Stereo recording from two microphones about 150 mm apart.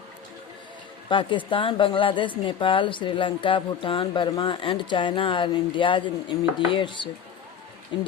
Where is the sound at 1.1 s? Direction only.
35° left (ahead or behind).